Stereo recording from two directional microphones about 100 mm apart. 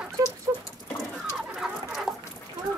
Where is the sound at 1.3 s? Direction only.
5° right (ahead or behind).